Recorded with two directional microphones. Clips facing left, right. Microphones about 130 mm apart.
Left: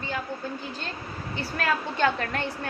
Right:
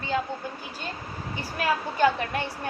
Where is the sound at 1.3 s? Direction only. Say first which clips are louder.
Even; 10° right (ahead or behind).